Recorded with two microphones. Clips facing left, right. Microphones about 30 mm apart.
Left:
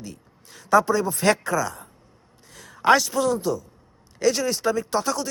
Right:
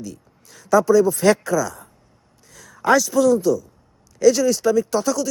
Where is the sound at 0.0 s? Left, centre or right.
Left.